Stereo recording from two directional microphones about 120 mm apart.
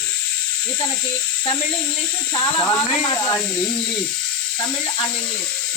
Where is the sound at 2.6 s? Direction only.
30° left (ahead or behind).